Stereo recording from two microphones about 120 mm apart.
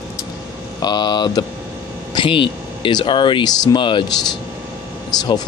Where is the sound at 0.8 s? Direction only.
35° left (ahead or behind).